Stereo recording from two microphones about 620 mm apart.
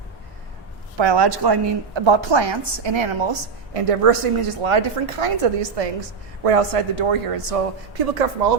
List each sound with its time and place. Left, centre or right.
0.9 s a woman's voice: right